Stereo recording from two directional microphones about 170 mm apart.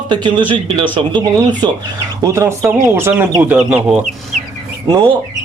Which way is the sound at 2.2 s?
15° right (ahead or behind).